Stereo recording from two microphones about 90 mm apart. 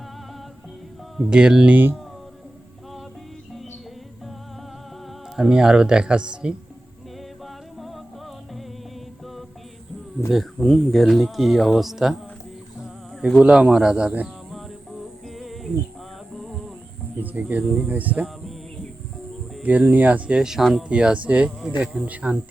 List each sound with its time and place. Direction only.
1.1 s speech: 5° right (ahead or behind)
5.4 s speech: 5° right (ahead or behind)
7.4 s music: centre (ahead or behind)
10.2 s speech: centre (ahead or behind)
13.4 s speech: 10° right (ahead or behind)
15.4 s music: centre (ahead or behind)
16.3 s a sound: centre (ahead or behind)
17.2 s speech: 20° right (ahead or behind)
19.6 s speech: 15° right (ahead or behind)